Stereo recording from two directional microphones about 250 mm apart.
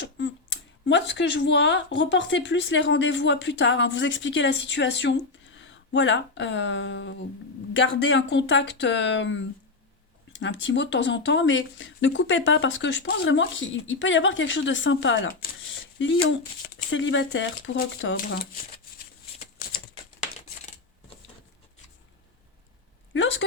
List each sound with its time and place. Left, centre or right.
0.9 s a woman's voice: left
23.1 s a woman's voice: left